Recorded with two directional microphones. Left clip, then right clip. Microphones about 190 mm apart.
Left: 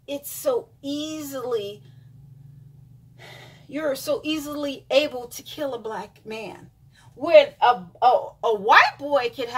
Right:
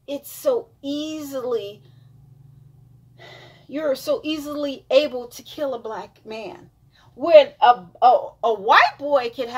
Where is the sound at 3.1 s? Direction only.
5° right (ahead or behind).